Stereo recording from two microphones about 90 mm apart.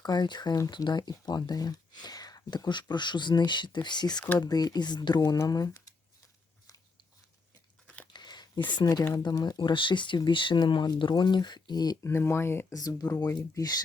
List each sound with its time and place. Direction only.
0.0 s speech: 50° left (ahead or behind)
2.9 s speech: 55° left (ahead or behind)
8.1 s a sound: 55° left (ahead or behind)
9.2 s speech: 50° left (ahead or behind)
12.0 s speech: 30° left (ahead or behind)
13.0 s speech: 45° left (ahead or behind)